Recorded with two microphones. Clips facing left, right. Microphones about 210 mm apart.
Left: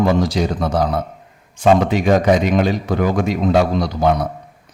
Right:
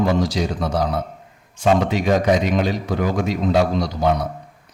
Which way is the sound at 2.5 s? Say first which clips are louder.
Left 3 dB; 55° left (ahead or behind).